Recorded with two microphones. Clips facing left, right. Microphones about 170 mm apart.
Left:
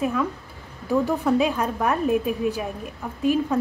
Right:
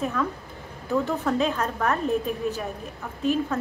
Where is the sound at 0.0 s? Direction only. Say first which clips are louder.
Left 3 dB; 10° left (ahead or behind).